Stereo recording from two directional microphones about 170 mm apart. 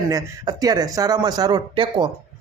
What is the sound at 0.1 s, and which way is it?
Speech, 20° right (ahead or behind).